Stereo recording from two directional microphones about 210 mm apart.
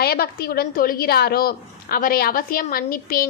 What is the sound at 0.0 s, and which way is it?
A woman's voice, 50° left (ahead or behind).